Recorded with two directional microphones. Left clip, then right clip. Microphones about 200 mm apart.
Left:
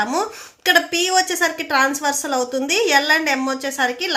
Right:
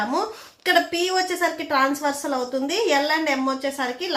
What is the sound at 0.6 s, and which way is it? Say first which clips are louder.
A woman's voice: left 4 dB; 25° left (ahead or behind).